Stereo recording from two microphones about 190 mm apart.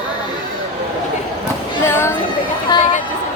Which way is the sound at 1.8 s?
15° left (ahead or behind).